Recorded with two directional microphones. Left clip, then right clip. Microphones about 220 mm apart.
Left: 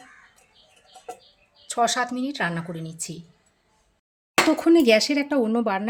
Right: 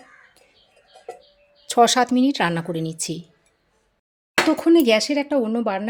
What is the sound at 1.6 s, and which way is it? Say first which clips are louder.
Speech: right 6 dB; 40° right (ahead or behind).